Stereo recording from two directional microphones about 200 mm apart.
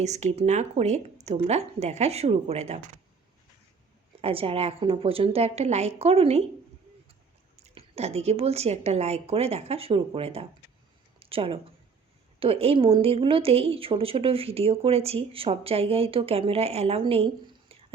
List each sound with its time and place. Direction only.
0.0 s speech: 35° right (ahead or behind)
4.2 s a woman's voice: 30° right (ahead or behind)
7.6 s a woman's voice: 30° right (ahead or behind)